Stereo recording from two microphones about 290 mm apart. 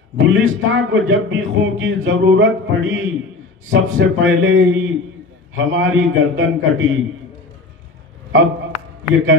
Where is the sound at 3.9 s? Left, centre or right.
Right.